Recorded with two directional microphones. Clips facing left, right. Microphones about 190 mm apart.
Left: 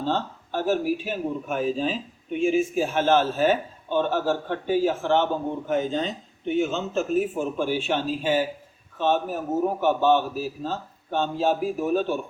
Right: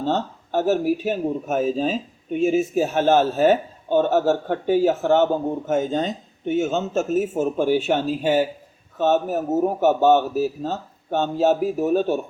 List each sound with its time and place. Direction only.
0.0 s speech: 45° right (ahead or behind)